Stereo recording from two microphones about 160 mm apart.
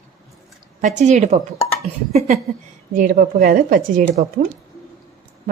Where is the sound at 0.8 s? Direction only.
50° right (ahead or behind).